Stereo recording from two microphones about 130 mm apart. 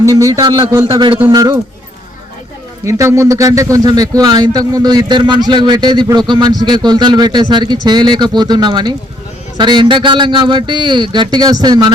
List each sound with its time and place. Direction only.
0.0 s a man's voice: 25° right (ahead or behind)
1.3 s a man's voice: 30° right (ahead or behind)
2.8 s a man's voice: 25° right (ahead or behind)